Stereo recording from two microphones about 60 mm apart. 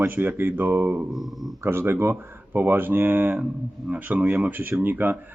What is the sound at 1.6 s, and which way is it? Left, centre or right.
Speech, right.